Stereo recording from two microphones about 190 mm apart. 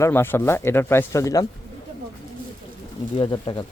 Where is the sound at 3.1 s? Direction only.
30° left (ahead or behind).